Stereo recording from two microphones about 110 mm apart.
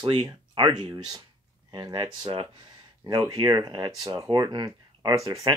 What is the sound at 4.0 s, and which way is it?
Speech, 30° right (ahead or behind).